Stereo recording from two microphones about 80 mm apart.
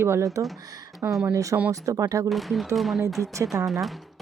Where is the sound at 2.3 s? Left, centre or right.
Centre.